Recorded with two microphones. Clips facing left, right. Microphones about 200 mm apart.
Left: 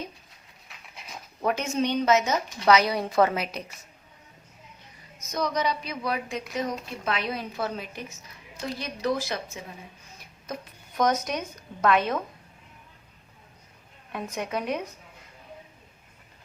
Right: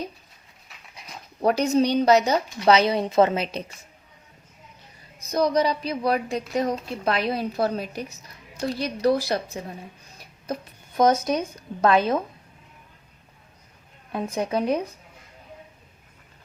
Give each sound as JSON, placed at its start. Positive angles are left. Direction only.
{"t": 1.4, "sound": "a woman's voice", "side_deg": -35}
{"t": 5.2, "sound": "a woman's voice", "side_deg": -35}
{"t": 14.1, "sound": "a woman's voice", "side_deg": -35}